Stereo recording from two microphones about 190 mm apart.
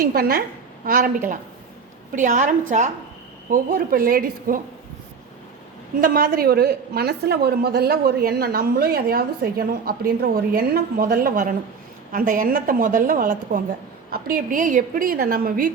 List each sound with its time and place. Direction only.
0.1 s a woman's voice: 50° right (ahead or behind)
6.0 s a woman's voice: 50° right (ahead or behind)